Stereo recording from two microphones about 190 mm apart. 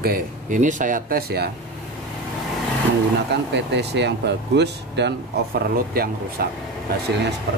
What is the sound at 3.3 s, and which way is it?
Speech, 65° right (ahead or behind).